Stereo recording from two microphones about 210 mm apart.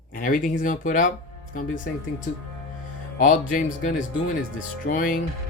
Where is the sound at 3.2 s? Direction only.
40° left (ahead or behind).